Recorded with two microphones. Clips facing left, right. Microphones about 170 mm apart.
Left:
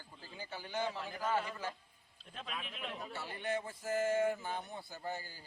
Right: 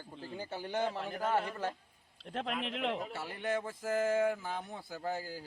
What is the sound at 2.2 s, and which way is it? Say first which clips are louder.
A man's voice: right 9 dB; 80° right.